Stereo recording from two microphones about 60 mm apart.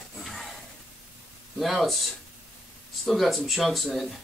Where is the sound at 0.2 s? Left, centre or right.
Centre.